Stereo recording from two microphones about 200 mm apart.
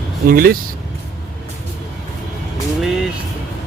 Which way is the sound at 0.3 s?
45° right (ahead or behind).